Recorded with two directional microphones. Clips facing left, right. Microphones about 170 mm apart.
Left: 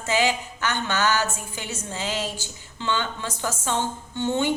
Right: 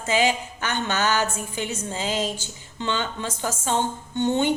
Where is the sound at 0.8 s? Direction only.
15° right (ahead or behind).